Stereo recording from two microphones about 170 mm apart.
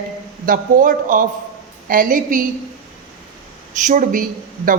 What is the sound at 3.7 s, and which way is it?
Speech, 45° right (ahead or behind).